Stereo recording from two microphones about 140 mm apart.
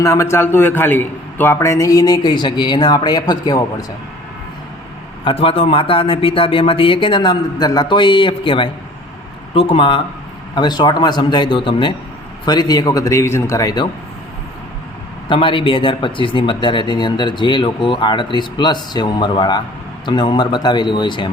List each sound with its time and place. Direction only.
0.0 s a man's voice: 20° left (ahead or behind)
5.2 s a man's voice: 40° left (ahead or behind); by 13.8 s 25° left (ahead or behind)
15.3 s speech: 35° left (ahead or behind)